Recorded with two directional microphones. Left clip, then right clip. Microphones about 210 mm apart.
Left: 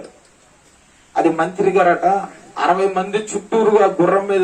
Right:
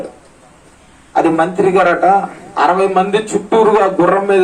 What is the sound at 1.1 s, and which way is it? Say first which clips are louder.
A man's voice: right 4 dB; 50° right (ahead or behind).